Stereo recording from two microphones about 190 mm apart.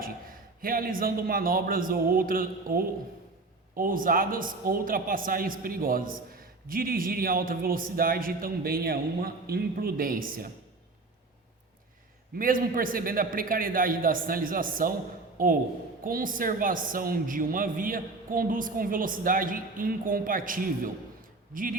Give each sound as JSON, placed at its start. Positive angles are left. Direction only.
{"t": 0.0, "sound": "a man's voice", "side_deg": -50}
{"t": 12.4, "sound": "a woman's voice", "side_deg": -45}